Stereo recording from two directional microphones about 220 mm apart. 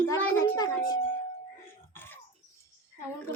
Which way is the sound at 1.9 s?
10° left (ahead or behind).